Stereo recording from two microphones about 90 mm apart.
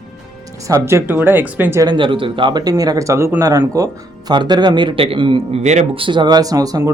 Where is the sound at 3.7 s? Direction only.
45° right (ahead or behind); by 5.4 s 75° right (ahead or behind).